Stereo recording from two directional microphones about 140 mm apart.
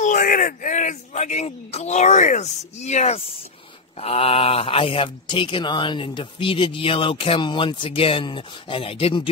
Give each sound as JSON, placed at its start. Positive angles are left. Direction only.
{"t": 0.0, "sound": "speech", "side_deg": 75}